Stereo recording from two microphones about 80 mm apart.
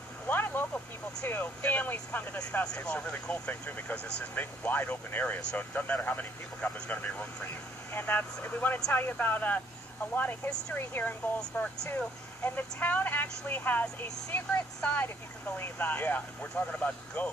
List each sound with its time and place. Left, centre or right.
0.3 s a sound: left
1.2 s speech: left
11.5 s speech: centre